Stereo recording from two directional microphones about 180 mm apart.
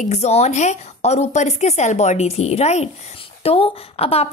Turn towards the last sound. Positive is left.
turn(degrees=35)  # may be behind; listen again after turning